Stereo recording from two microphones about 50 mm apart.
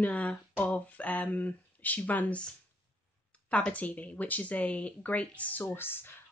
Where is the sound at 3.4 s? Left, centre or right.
Left.